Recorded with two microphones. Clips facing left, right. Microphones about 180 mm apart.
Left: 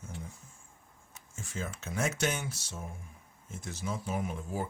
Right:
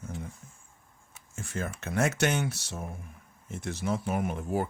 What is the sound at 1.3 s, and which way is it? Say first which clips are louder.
Speech: right 4 dB; 65° right (ahead or behind).